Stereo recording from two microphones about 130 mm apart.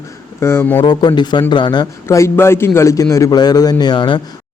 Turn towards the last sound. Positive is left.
turn(degrees=35)  # may be behind; listen again after turning